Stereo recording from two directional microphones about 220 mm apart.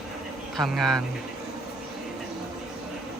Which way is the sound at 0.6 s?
Centre (ahead or behind).